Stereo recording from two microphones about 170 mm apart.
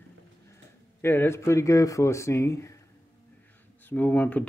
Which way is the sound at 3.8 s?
10° left (ahead or behind).